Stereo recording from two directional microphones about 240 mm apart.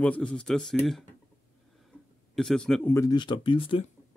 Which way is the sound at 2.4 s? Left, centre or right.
Centre.